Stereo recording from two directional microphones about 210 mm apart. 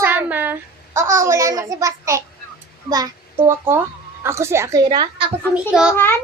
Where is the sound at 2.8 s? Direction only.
20° right (ahead or behind).